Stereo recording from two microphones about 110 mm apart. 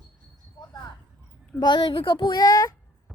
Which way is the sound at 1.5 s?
40° left (ahead or behind).